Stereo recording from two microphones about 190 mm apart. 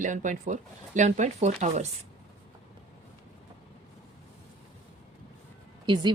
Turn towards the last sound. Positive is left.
turn(degrees=-25)  # may be behind; listen again after turning